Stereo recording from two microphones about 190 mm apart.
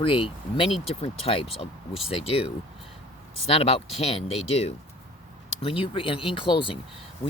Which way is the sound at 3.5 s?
30° left (ahead or behind).